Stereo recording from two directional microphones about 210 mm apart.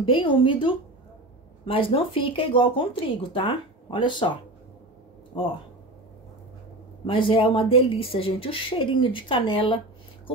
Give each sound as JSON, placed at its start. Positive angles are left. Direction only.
{"t": 0.0, "sound": "speech", "side_deg": 25}
{"t": 5.3, "sound": "speech", "side_deg": 25}
{"t": 7.1, "sound": "speech", "side_deg": 25}